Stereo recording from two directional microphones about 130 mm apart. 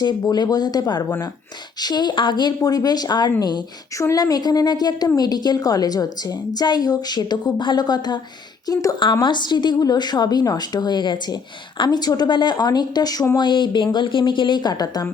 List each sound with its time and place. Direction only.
0.0 s a woman's voice: 35° left (ahead or behind)